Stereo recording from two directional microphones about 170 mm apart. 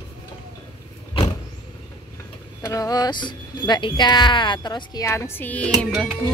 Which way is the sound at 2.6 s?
20° left (ahead or behind).